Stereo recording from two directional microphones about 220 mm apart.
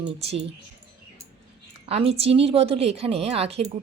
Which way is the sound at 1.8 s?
25° right (ahead or behind).